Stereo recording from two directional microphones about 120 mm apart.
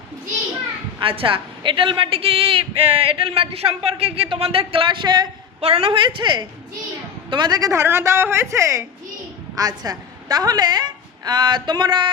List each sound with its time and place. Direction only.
0.9 s a man's voice: 50° right (ahead or behind)
5.5 s a man's voice: 55° right (ahead or behind); by 12.1 s 40° right (ahead or behind)